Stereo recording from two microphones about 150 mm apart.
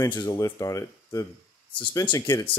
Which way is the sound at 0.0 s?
25° left (ahead or behind).